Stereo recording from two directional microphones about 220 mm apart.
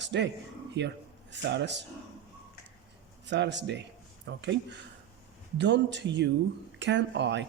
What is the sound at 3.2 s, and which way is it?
Speech, 55° right (ahead or behind).